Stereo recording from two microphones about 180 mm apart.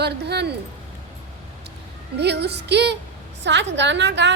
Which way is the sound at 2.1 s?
70° right (ahead or behind).